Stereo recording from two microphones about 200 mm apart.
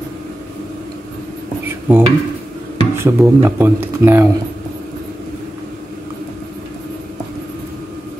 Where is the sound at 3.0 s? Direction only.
15° right (ahead or behind).